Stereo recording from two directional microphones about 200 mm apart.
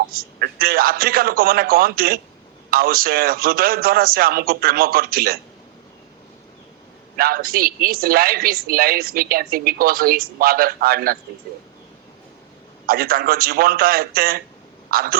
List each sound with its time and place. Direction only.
0.1 s a woman's voice: 50° right (ahead or behind)
7.2 s a woman's voice: 50° right (ahead or behind)
12.8 s a woman's voice: 50° right (ahead or behind)